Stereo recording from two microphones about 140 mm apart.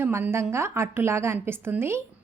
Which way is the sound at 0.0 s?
15° right (ahead or behind).